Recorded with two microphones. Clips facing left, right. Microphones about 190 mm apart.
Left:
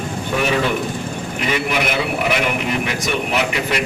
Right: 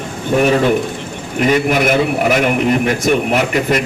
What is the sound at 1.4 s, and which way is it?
A man's voice, 45° right (ahead or behind).